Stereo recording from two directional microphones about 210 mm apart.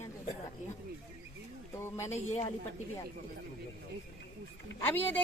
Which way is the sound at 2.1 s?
30° left (ahead or behind).